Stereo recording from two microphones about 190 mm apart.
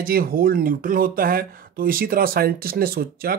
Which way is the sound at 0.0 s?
50° right (ahead or behind).